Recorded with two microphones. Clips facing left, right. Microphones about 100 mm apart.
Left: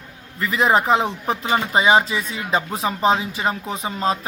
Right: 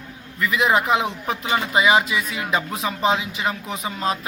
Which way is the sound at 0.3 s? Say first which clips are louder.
Left 1 dB; 35° left (ahead or behind).